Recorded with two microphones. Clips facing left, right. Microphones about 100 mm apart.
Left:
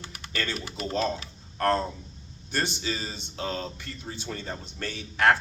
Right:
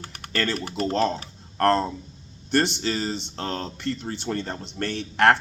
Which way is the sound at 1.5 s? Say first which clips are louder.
Right 4 dB; 65° right (ahead or behind).